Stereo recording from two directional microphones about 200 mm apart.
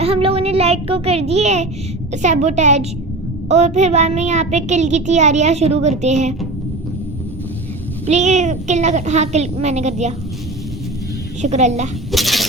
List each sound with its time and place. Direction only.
0.0 s a child's voice: 30° right (ahead or behind)
8.0 s a child's voice: 35° right (ahead or behind)
11.4 s a child's voice: 35° right (ahead or behind)
12.1 s a sound: centre (ahead or behind)